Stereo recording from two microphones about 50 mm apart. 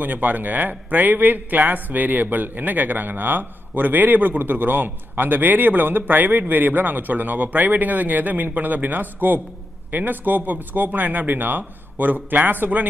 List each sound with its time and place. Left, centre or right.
0.0 s a man's voice: right